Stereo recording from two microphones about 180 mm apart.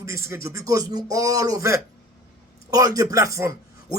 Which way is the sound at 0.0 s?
15° right (ahead or behind).